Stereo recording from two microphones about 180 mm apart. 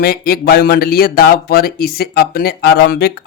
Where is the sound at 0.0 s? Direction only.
55° left (ahead or behind).